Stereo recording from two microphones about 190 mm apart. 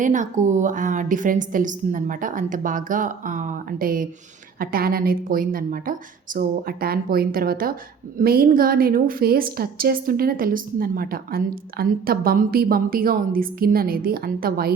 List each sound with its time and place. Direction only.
0.0 s a woman's voice: 40° right (ahead or behind)